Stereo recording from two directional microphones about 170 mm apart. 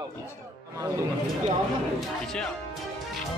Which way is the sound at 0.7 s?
20° right (ahead or behind).